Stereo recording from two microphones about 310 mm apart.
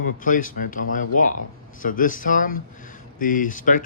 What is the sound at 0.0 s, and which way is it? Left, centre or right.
Speech, left.